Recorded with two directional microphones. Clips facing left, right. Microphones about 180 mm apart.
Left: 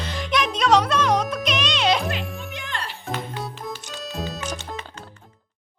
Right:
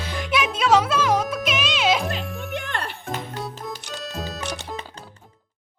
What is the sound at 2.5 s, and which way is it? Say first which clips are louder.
Music: right 3 dB; 55° right (ahead or behind).